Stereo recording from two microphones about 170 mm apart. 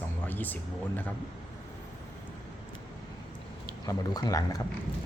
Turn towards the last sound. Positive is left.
turn(degrees=20)  # may be behind; listen again after turning